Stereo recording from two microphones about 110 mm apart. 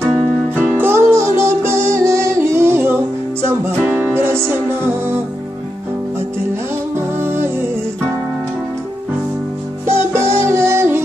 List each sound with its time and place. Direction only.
0.6 s music: 15° right (ahead or behind)
7.2 s music: 20° right (ahead or behind)
9.8 s music: 25° right (ahead or behind)